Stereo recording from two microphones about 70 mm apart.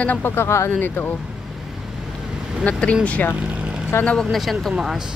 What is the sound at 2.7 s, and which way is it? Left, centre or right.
Speech, centre.